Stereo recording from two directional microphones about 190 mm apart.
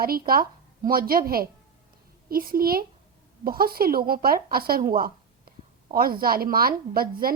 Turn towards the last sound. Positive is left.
turn(degrees=-50)  # may be behind; listen again after turning